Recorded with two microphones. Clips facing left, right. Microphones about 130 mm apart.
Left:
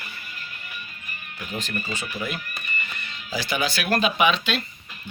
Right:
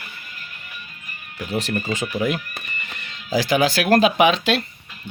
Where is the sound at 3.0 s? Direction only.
90° right.